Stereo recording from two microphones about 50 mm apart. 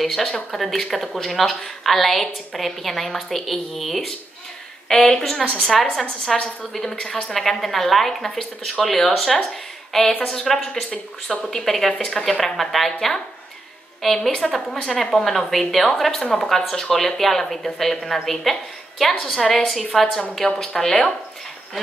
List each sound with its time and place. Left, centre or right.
0.0 s a woman's voice: centre
16.2 s a woman's voice: centre